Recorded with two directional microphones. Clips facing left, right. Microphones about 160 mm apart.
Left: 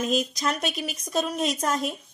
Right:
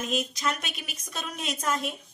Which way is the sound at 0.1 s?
40° left (ahead or behind).